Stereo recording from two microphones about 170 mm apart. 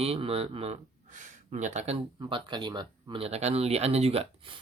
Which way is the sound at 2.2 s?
25° right (ahead or behind).